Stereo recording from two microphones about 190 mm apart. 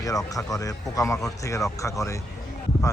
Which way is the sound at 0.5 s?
20° left (ahead or behind).